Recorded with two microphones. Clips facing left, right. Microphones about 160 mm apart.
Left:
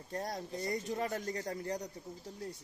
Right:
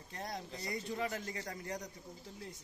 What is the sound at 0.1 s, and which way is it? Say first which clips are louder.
A man's voice: left 5 dB; 40° left (ahead or behind).